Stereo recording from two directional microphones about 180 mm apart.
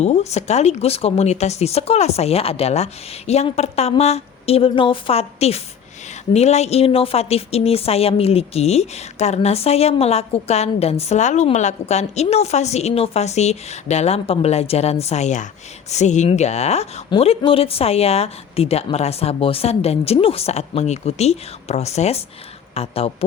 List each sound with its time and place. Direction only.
0.0 s speech: 40° left (ahead or behind)